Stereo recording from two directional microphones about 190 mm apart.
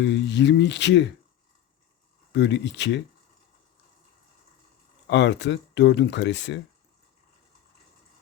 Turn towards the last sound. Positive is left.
turn(degrees=65)  # may be behind; listen again after turning